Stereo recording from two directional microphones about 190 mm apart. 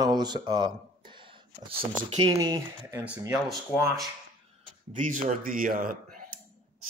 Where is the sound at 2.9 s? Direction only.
10° right (ahead or behind).